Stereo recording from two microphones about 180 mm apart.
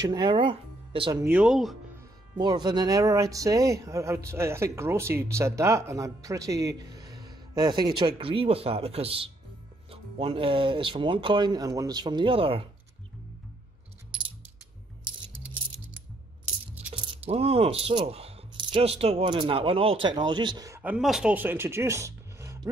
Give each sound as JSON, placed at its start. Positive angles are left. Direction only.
{"t": 0.0, "sound": "speech", "side_deg": -25}
{"t": 1.2, "sound": "speech", "side_deg": -5}
{"t": 2.3, "sound": "speech", "side_deg": -25}
{"t": 14.1, "sound": "a sound", "side_deg": -30}
{"t": 16.9, "sound": "speech", "side_deg": -30}
{"t": 20.8, "sound": "speech", "side_deg": -5}